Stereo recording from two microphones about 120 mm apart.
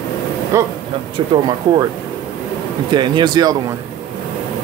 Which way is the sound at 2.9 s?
40° right (ahead or behind).